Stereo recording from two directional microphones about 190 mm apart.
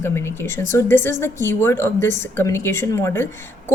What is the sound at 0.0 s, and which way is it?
A woman's voice, 15° left (ahead or behind).